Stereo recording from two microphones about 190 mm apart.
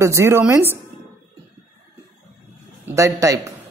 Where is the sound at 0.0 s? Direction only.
15° right (ahead or behind).